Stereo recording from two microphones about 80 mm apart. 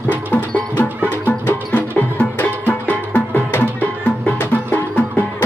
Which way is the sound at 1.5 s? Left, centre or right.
Centre.